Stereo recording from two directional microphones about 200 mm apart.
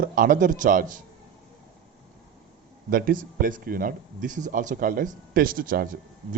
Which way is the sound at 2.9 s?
45° right (ahead or behind).